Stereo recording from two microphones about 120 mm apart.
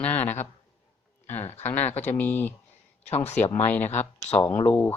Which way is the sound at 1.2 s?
15° left (ahead or behind).